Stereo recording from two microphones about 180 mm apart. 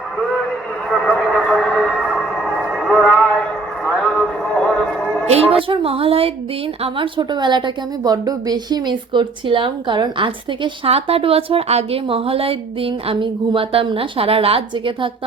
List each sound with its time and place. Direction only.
0.2 s a sound: centre (ahead or behind)
3.8 s vehicle: centre (ahead or behind)
4.8 s music: centre (ahead or behind)
5.3 s a woman's voice: 30° right (ahead or behind)